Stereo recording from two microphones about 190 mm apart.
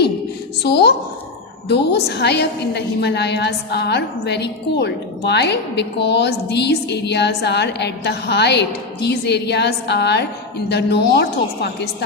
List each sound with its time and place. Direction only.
0.6 s a woman's voice: 60° left (ahead or behind)